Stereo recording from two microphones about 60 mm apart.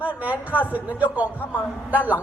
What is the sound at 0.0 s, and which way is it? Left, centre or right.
A man's voice, right.